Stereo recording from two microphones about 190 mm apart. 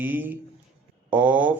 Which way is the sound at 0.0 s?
10° right (ahead or behind).